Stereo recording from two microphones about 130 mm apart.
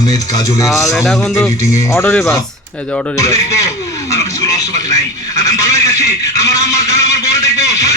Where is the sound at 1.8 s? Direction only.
20° left (ahead or behind).